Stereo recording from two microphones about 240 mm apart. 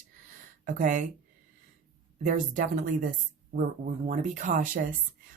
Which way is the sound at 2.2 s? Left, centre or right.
Right.